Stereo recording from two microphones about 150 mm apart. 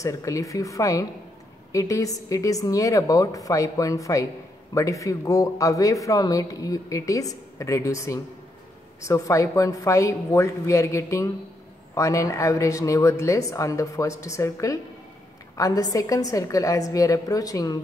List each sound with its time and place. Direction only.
0.0 s speech: 20° left (ahead or behind)